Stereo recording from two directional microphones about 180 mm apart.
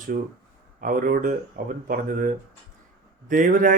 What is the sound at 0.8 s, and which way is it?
Speech, 50° right (ahead or behind).